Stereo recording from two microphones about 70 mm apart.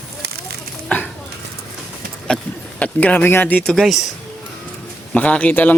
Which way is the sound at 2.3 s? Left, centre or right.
Centre.